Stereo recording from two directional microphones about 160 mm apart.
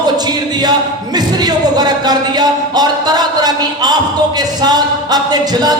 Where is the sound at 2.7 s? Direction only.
25° right (ahead or behind).